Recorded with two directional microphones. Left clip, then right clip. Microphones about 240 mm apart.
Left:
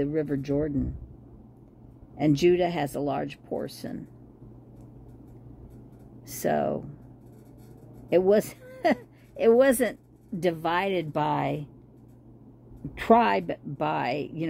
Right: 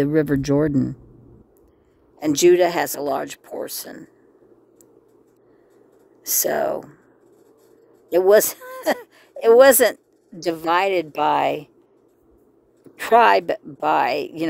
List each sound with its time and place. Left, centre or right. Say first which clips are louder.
0.0 s speech: right 9 dB; right
2.1 s speech: right 7 dB; right
6.2 s speech: right 5 dB; right
8.1 s speech: right 7 dB; right
12.9 s speech: right 7 dB; right